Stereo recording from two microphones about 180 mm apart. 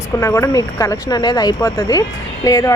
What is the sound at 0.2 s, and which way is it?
Speech, 15° left (ahead or behind).